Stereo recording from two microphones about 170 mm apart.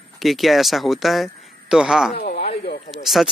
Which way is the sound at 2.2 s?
55° left (ahead or behind).